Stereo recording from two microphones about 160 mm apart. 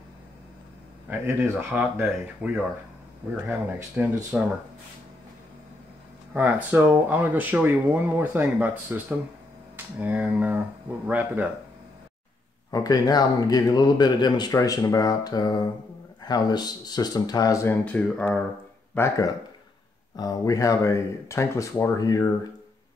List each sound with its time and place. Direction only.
1.0 s speech: 15° right (ahead or behind)
6.3 s speech: 10° right (ahead or behind)
12.7 s speech: 25° left (ahead or behind)
17.8 s speech: 10° left (ahead or behind)
18.9 s speech: 20° left (ahead or behind)